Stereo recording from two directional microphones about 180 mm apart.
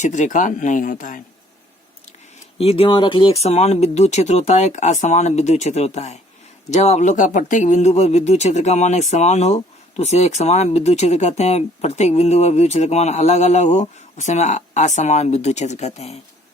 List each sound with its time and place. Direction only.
0.0 s speech: 40° left (ahead or behind)
2.6 s speech: 35° left (ahead or behind)